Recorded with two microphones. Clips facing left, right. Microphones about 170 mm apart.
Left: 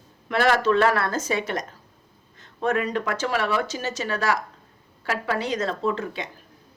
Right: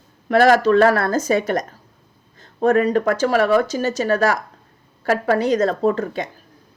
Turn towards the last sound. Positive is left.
turn(degrees=-45)  # may be behind; listen again after turning